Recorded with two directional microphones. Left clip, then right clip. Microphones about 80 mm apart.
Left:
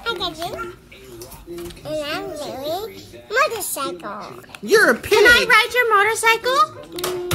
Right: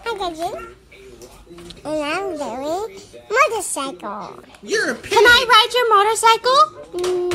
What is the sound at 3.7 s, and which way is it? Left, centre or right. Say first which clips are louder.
Speech: even; right.